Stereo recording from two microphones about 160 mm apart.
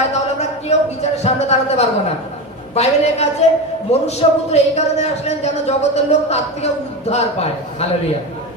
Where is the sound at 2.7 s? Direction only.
40° left (ahead or behind).